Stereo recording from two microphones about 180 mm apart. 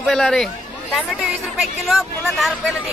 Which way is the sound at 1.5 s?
Centre (ahead or behind).